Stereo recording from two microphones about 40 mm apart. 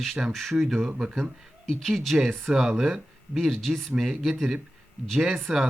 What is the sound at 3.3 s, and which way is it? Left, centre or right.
A man's voice, centre.